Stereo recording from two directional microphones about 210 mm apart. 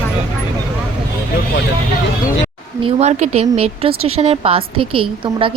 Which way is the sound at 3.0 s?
30° right (ahead or behind).